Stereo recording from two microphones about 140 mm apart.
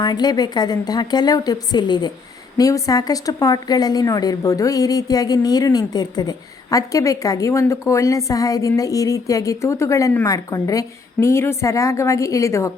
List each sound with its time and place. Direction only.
0.0 s speech: 30° left (ahead or behind)